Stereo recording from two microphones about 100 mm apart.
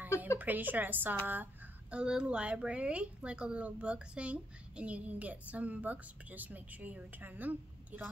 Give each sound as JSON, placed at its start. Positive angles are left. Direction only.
{"t": 0.4, "sound": "speech", "side_deg": -20}